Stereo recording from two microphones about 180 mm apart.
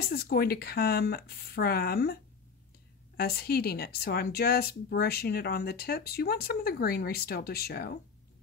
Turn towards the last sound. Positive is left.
turn(degrees=60)  # may be behind; listen again after turning